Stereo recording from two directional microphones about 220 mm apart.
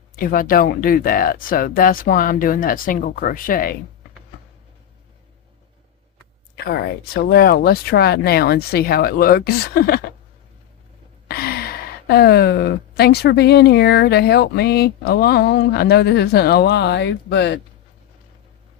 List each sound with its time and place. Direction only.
0.2 s speech: 40° left (ahead or behind)
6.7 s a woman's voice: 45° left (ahead or behind)
11.3 s a woman's voice: 45° left (ahead or behind)